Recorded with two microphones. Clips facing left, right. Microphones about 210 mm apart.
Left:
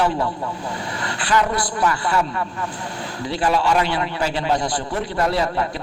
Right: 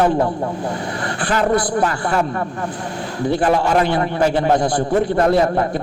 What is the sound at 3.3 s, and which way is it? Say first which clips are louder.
A man's voice: right 3 dB; 50° right (ahead or behind).